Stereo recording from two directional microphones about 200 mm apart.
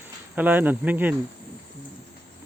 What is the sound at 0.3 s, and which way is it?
Speech, 10° right (ahead or behind).